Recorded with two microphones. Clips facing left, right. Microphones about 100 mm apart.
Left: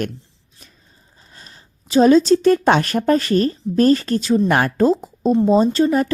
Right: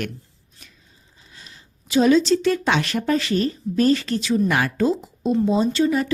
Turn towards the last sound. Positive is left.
turn(degrees=45)  # may be behind; listen again after turning